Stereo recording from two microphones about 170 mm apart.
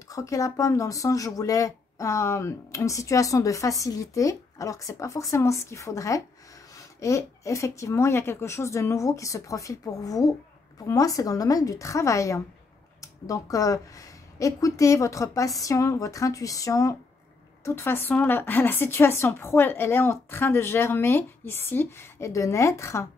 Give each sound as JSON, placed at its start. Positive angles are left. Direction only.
{"t": 0.1, "sound": "a woman's voice", "side_deg": 20}